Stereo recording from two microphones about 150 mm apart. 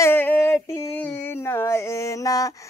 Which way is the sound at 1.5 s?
20° left (ahead or behind).